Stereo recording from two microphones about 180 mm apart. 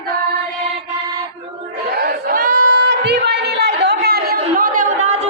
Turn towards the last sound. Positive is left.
turn(degrees=-45)  # may be behind; listen again after turning